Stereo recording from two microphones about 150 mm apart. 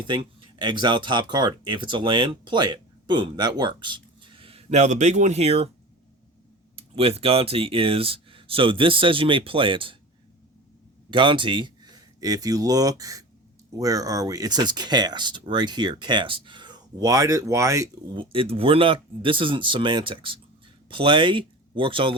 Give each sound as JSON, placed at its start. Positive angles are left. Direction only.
{"t": 0.0, "sound": "speech", "side_deg": -35}
{"t": 6.7, "sound": "speech", "side_deg": -40}
{"t": 11.1, "sound": "speech", "side_deg": -35}
{"t": 18.1, "sound": "speech", "side_deg": -35}